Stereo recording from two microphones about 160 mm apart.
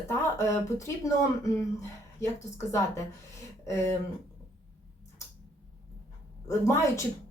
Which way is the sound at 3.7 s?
15° left (ahead or behind).